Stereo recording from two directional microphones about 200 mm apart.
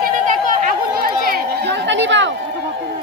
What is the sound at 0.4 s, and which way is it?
Chatter, 45° right (ahead or behind).